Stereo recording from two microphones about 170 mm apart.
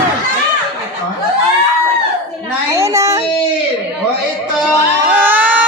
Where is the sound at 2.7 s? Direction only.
20° right (ahead or behind).